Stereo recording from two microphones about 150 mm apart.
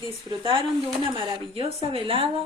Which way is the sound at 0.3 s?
35° right (ahead or behind).